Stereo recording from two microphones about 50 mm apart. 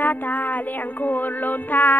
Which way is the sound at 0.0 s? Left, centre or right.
Left.